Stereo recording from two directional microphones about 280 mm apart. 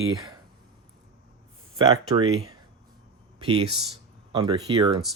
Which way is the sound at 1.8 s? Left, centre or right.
Centre.